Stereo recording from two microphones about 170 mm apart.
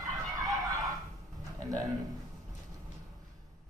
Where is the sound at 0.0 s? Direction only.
20° right (ahead or behind).